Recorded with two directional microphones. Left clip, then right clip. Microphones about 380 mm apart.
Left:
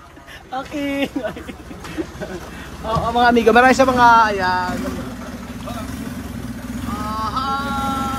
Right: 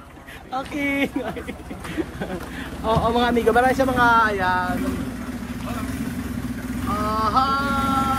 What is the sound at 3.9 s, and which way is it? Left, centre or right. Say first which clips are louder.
Speech: left 5 dB; centre.